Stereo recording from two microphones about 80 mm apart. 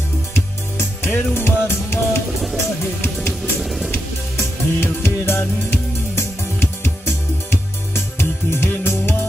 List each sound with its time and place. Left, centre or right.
0.7 s music: left
3.6 s music: centre
3.9 s music: left
7.9 s music: left